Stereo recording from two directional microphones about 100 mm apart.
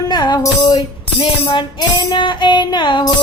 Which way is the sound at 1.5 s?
55° left (ahead or behind).